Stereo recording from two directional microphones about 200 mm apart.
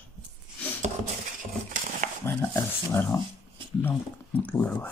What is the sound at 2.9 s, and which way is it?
Speech, 15° left (ahead or behind).